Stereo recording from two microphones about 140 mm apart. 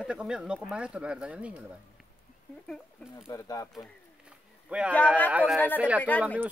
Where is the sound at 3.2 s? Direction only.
25° left (ahead or behind).